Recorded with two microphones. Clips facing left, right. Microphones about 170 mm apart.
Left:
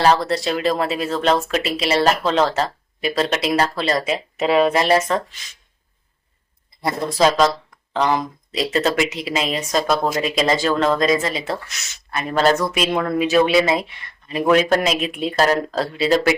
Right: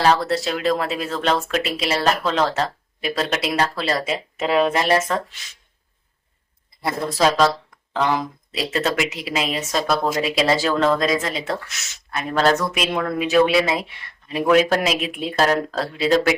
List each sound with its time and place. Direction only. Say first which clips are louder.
0.0 s speech: left 1 dB; centre (ahead or behind)
6.8 s speech: left 2 dB; centre (ahead or behind)